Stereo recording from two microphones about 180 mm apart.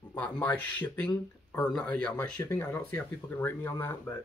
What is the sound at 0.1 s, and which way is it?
Speech, 10° left (ahead or behind).